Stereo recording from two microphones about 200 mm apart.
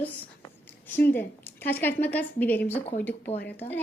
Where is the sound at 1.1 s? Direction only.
10° left (ahead or behind).